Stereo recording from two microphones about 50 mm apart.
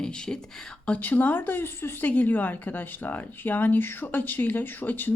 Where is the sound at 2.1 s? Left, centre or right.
Left.